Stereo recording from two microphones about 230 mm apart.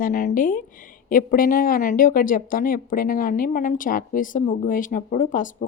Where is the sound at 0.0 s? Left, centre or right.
Left.